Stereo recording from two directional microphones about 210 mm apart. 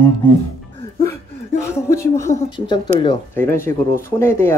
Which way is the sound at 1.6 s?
15° left (ahead or behind).